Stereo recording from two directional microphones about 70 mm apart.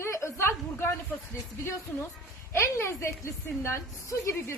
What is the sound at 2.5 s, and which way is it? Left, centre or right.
A woman's voice, left.